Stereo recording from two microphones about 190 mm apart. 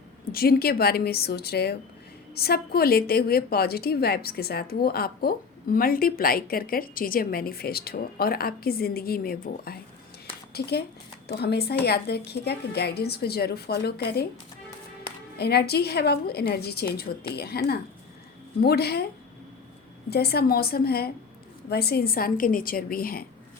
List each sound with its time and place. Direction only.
0.3 s a woman's voice: 50° left (ahead or behind)
15.4 s a woman's voice: 55° left (ahead or behind)
20.1 s a woman's voice: 55° left (ahead or behind)